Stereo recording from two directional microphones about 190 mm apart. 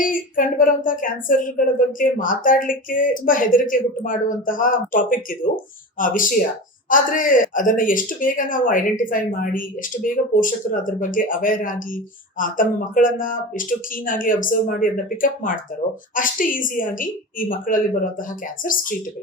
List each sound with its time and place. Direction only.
0.0 s speech: 45° left (ahead or behind)